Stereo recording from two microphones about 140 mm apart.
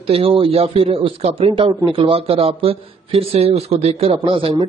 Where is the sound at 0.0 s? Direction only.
45° right (ahead or behind).